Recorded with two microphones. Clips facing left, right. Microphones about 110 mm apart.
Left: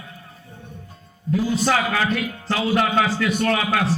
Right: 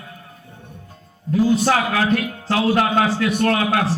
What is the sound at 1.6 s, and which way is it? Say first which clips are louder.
A man's voice: right 2 dB; 50° right (ahead or behind).